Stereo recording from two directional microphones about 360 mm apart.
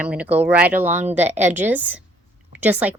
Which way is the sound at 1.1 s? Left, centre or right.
Centre.